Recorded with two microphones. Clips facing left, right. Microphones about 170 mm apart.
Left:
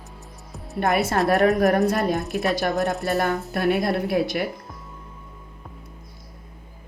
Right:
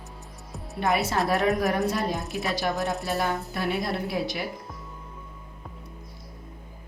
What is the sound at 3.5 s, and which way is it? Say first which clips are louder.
Speech: left 6 dB; 60° left (ahead or behind).